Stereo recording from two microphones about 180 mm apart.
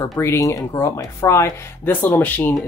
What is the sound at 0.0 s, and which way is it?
Speech, 15° left (ahead or behind).